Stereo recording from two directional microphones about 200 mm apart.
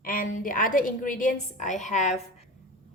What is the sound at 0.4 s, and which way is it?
A woman's voice, 45° left (ahead or behind).